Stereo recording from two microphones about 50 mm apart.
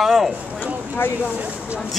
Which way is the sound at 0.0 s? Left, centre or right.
Centre.